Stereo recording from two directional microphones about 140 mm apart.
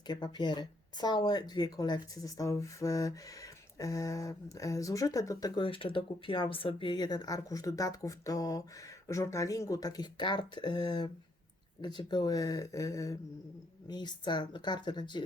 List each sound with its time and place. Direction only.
0.1 s speech: 30° left (ahead or behind)